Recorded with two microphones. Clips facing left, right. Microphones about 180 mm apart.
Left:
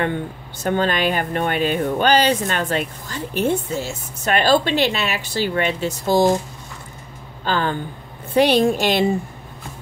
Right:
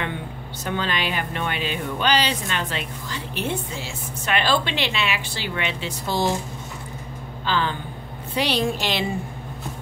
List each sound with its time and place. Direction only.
0.7 s speech: 45° left (ahead or behind)
7.4 s speech: 45° left (ahead or behind)